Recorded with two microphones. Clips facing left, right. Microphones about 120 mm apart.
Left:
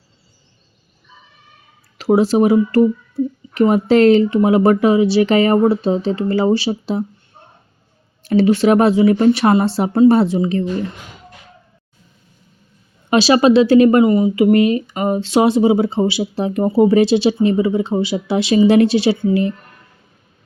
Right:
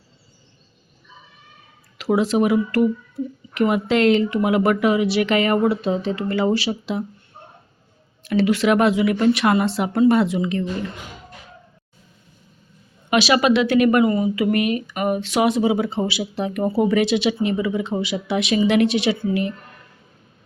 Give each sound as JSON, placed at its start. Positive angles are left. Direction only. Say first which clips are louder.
{"t": 2.0, "sound": "speech", "louder": "left 5 dB", "side_deg": 35}
{"t": 8.2, "sound": "speech", "louder": "left 5 dB", "side_deg": 35}
{"t": 13.1, "sound": "speech", "louder": "left 5 dB", "side_deg": 30}